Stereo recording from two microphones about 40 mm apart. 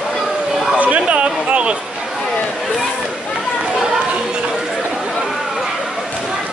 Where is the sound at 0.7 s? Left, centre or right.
Right.